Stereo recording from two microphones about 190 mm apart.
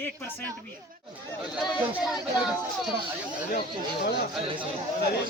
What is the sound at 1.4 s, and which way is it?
Speech, centre (ahead or behind).